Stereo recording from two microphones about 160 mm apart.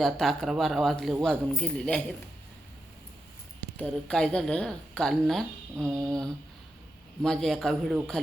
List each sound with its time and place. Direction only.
0.0 s speech: centre (ahead or behind)
3.8 s speech: 5° left (ahead or behind)
5.7 s a sound: 15° right (ahead or behind)
7.2 s speech: centre (ahead or behind)